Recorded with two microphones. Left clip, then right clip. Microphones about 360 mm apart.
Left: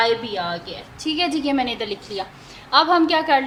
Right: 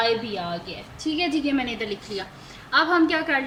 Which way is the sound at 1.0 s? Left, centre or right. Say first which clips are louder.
Left 3 dB; centre.